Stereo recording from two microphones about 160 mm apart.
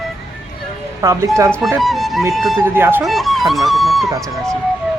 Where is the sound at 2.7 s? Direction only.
15° right (ahead or behind).